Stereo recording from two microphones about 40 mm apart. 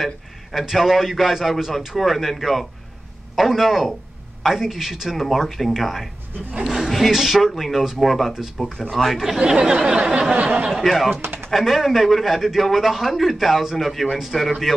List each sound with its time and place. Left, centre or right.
0.0 s a man's voice: centre
9.4 s a sound: centre
10.3 s speech: right
10.7 s a man's voice: centre